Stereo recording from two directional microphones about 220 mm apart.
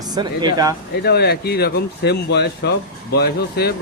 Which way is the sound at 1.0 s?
45° left (ahead or behind).